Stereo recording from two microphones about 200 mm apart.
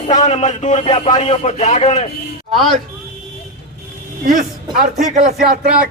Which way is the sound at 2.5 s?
Centre (ahead or behind).